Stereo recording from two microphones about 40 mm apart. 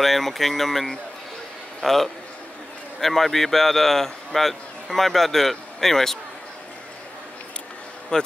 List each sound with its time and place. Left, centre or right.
0.0 s a man's voice: centre
8.1 s a man's voice: centre